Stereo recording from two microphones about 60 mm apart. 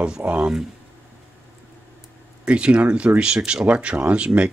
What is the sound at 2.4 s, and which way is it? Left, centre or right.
Speech, centre.